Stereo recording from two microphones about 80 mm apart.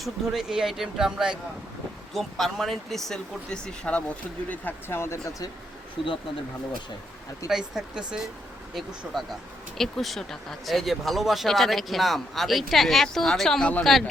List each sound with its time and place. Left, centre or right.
0.0 s speech: centre
4.4 s speech: left
6.0 s speech: centre
7.4 s speech: centre